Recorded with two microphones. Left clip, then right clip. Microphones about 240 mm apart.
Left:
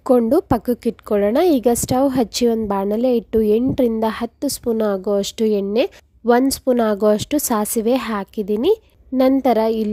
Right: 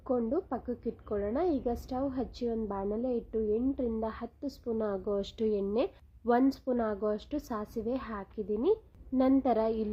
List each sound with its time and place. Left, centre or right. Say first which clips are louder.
0.0 s a woman's voice: left 16 dB; left